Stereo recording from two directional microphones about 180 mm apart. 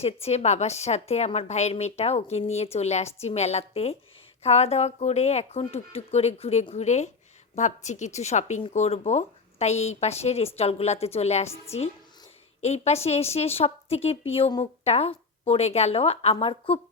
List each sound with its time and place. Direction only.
0.0 s a woman's voice: 35° left (ahead or behind)
12.6 s a woman's voice: 35° left (ahead or behind)